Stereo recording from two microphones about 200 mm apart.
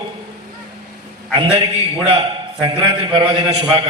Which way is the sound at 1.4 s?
25° right (ahead or behind).